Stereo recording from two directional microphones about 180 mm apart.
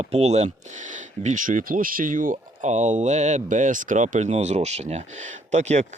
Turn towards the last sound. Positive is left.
turn(degrees=-40)  # may be behind; listen again after turning